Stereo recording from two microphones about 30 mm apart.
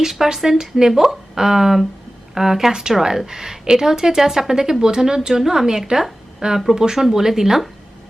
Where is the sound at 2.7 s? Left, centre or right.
Right.